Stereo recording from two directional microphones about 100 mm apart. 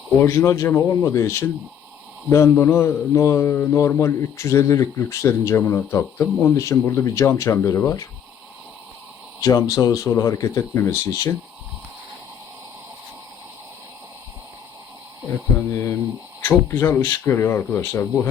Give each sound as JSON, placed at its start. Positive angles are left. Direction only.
{"t": 0.2, "sound": "speech", "side_deg": 30}
{"t": 9.4, "sound": "speech", "side_deg": 35}
{"t": 15.7, "sound": "speech", "side_deg": 30}